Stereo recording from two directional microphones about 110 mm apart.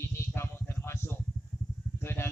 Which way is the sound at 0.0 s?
20° left (ahead or behind).